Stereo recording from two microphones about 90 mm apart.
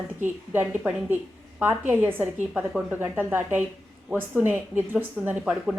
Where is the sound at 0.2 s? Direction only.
20° right (ahead or behind).